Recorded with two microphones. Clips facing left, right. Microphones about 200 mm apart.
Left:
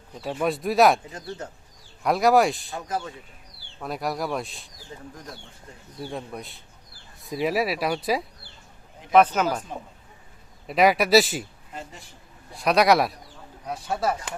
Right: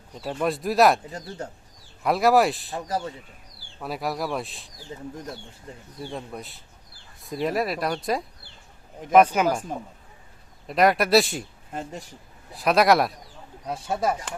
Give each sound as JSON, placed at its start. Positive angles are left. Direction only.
{"t": 0.1, "sound": "speech", "side_deg": 0}
{"t": 2.0, "sound": "speech", "side_deg": 0}
{"t": 2.7, "sound": "speech", "side_deg": -35}
{"t": 3.8, "sound": "speech", "side_deg": 0}
{"t": 4.9, "sound": "speech", "side_deg": -20}
{"t": 6.0, "sound": "speech", "side_deg": 0}
{"t": 9.1, "sound": "speech", "side_deg": -10}
{"t": 9.7, "sound": "speech", "side_deg": -45}
{"t": 10.7, "sound": "speech", "side_deg": 0}
{"t": 11.7, "sound": "speech", "side_deg": -50}
{"t": 12.5, "sound": "speech", "side_deg": 0}
{"t": 13.7, "sound": "speech", "side_deg": -25}